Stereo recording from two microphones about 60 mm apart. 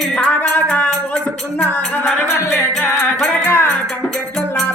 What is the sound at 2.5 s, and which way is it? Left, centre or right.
Music, centre.